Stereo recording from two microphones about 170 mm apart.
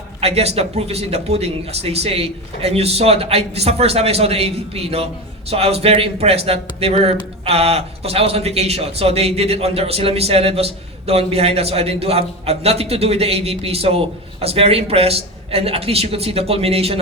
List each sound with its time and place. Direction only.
0.2 s a man's voice: 35° right (ahead or behind)